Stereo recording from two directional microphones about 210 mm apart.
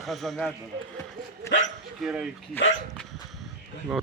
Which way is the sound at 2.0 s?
5° right (ahead or behind).